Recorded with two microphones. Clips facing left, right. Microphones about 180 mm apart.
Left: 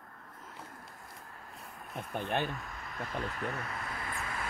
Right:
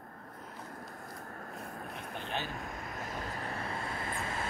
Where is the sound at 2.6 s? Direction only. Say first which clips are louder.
Right 1 dB; 50° right (ahead or behind); by 4.4 s 25° right (ahead or behind).